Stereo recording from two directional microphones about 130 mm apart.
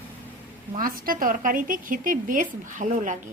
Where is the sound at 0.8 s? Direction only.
90° right.